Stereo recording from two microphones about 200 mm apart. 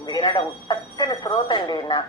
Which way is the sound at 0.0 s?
20° left (ahead or behind).